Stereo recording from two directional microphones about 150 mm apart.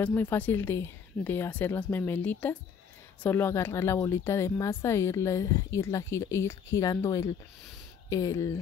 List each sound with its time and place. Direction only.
0.0 s speech: 15° left (ahead or behind)